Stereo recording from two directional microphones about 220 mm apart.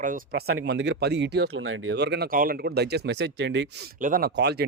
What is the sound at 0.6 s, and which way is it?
Speech, 50° right (ahead or behind).